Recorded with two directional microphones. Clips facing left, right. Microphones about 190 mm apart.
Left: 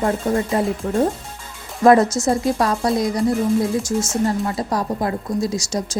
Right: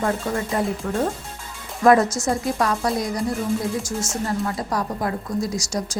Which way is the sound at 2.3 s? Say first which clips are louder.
Left 4 dB; 30° left (ahead or behind).